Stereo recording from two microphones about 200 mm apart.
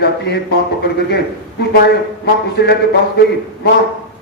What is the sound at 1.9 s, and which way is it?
Speech, 55° left (ahead or behind).